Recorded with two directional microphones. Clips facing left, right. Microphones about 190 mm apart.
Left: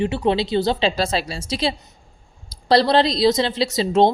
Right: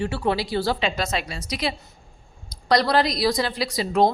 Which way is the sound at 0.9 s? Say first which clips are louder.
Left 4 dB; 30° left (ahead or behind).